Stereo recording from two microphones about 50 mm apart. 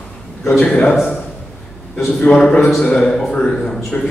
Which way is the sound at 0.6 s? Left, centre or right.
Left.